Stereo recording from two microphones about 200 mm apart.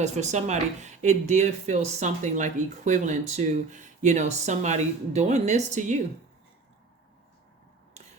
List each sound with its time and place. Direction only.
0.0 s speech: 35° right (ahead or behind)
8.0 s finger snapping: 35° right (ahead or behind)